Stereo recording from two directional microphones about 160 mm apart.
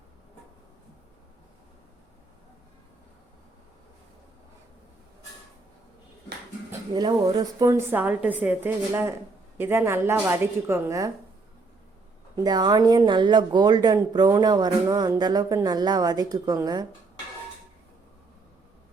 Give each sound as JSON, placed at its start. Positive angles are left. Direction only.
{"t": 6.9, "sound": "a woman's voice", "side_deg": -25}
{"t": 12.4, "sound": "speech", "side_deg": -25}